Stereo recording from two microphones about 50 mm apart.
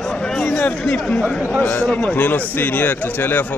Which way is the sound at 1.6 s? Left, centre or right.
Left.